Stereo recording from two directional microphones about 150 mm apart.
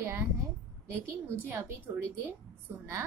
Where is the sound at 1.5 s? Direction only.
15° right (ahead or behind).